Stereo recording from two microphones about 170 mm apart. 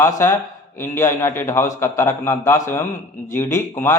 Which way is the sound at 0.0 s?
15° left (ahead or behind).